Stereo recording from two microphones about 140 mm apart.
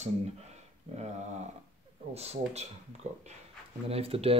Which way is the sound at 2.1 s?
50° right (ahead or behind).